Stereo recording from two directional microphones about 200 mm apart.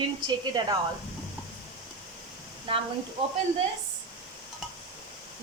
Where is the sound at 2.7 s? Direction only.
25° right (ahead or behind).